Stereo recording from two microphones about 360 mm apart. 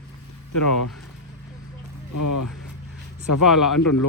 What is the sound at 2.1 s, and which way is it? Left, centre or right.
Speech, left.